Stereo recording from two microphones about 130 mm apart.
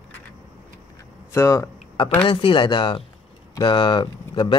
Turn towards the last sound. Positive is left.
turn(degrees=35)  # may be behind; listen again after turning